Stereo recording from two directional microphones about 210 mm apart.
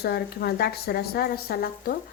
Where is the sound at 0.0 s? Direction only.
50° left (ahead or behind).